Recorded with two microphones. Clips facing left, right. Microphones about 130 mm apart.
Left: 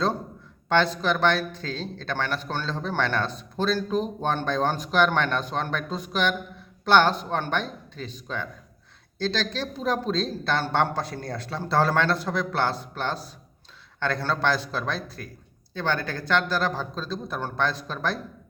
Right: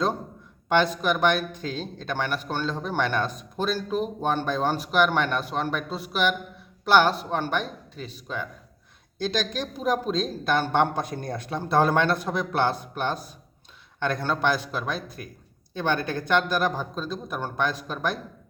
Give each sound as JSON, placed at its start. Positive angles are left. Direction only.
{"t": 0.7, "sound": "speech", "side_deg": -15}